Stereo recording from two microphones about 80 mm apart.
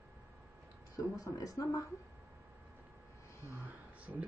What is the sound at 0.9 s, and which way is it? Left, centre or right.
Speech, left.